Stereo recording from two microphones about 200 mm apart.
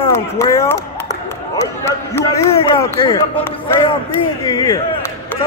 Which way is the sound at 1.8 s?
15° left (ahead or behind).